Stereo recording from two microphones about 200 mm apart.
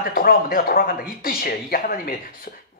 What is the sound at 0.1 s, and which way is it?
A man's voice, 45° left (ahead or behind).